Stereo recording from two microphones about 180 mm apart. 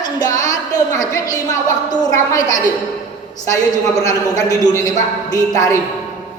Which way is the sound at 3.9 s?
20° left (ahead or behind).